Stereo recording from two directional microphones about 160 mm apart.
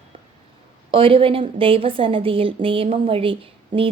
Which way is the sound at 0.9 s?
35° right (ahead or behind).